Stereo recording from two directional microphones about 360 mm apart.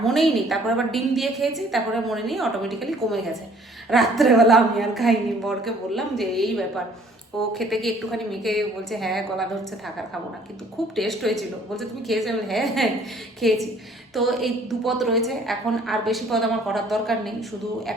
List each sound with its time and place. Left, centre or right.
0.0 s a woman's voice: centre
10.9 s a woman's voice: centre